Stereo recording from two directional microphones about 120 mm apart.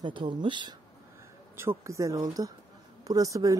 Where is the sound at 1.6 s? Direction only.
25° right (ahead or behind).